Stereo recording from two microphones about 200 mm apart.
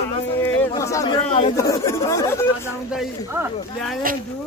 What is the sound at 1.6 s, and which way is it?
Chatter, 15° left (ahead or behind).